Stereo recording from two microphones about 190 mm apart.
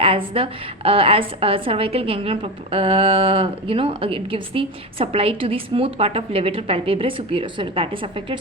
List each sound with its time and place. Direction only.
0.0 s a woman's voice: 30° right (ahead or behind)